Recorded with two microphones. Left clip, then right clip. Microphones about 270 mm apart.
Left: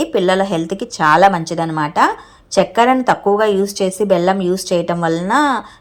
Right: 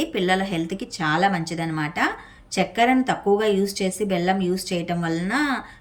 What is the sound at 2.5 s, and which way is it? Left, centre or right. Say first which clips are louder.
Speech: left 8 dB; centre.